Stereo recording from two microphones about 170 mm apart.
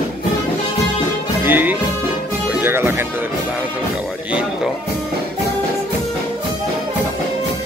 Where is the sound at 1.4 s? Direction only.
10° right (ahead or behind).